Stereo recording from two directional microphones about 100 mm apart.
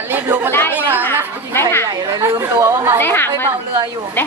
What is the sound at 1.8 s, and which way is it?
A woman's voice, 30° right (ahead or behind).